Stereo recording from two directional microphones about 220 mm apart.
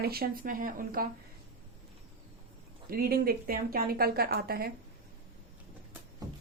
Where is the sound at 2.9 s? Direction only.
45° right (ahead or behind).